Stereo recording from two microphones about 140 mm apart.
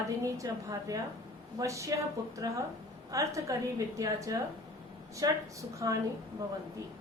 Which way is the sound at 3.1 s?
25° right (ahead or behind).